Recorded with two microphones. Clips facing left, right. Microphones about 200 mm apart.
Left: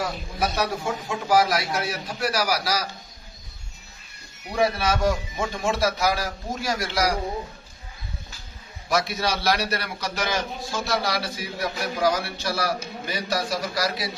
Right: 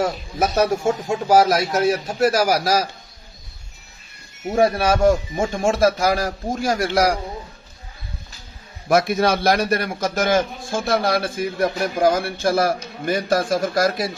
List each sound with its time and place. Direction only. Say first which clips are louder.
0.0 s a man's voice: right 6 dB; 45° right (ahead or behind)
4.5 s a man's voice: right 6 dB; 50° right (ahead or behind)
8.8 s a man's voice: right 8 dB; 50° right (ahead or behind)